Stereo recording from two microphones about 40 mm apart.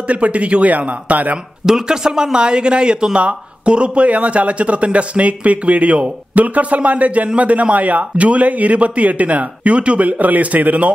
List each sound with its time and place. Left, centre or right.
0.1 s speech: right
1.7 s speech: centre; by 10.9 s right